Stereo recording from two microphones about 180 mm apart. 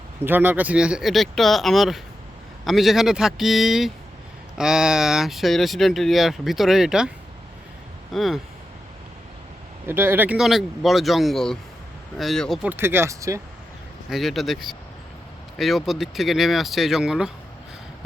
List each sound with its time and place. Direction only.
0.3 s speech: 10° right (ahead or behind)
8.1 s speech: centre (ahead or behind)
9.8 s speech: 10° right (ahead or behind)
12.6 s speech: 10° right (ahead or behind)
14.1 s speech: centre (ahead or behind)